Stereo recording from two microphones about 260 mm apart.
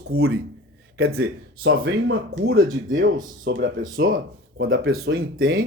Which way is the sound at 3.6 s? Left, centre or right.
Right.